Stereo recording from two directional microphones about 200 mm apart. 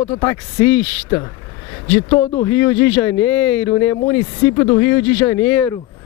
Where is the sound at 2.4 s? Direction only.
10° left (ahead or behind).